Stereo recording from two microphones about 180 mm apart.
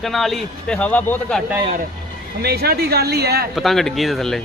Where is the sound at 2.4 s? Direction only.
60° right (ahead or behind).